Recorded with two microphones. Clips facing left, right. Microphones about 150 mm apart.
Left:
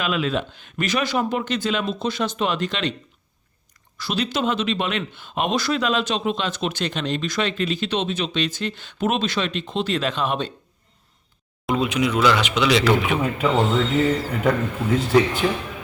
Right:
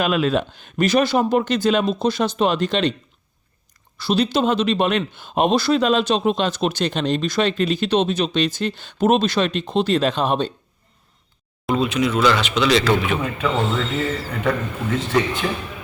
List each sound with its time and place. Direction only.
0.0 s speech: 40° right (ahead or behind)
3.9 s speech: 30° right (ahead or behind)
11.7 s speech: 10° left (ahead or behind)